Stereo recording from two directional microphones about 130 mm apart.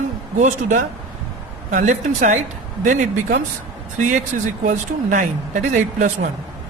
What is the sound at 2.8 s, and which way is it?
Speech, 90° right.